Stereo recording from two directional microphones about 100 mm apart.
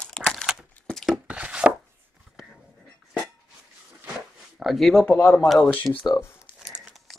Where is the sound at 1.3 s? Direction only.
10° right (ahead or behind).